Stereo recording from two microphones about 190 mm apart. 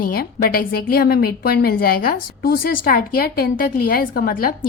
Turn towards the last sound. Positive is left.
turn(degrees=50)  # may be behind; listen again after turning